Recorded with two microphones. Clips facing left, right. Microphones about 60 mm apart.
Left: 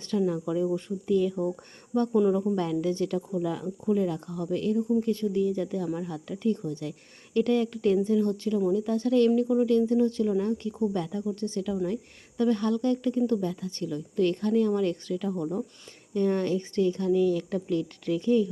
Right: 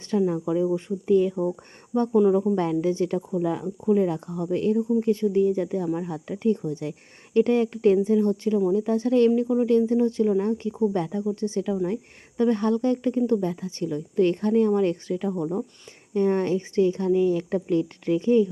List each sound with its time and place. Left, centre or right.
0.1 s speech: right
11.2 s speech: centre